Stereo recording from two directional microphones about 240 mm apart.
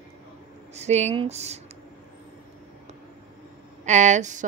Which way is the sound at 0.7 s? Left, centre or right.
Right.